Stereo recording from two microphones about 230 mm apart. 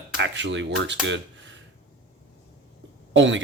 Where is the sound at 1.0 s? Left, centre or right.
Right.